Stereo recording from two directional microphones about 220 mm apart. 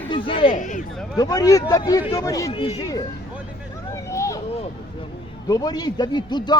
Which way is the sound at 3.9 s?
15° left (ahead or behind).